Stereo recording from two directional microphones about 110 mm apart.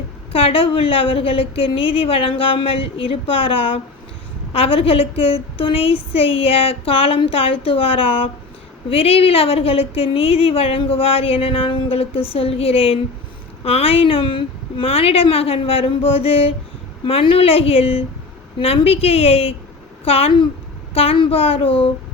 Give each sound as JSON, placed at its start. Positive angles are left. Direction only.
{"t": 0.3, "sound": "speech", "side_deg": 60}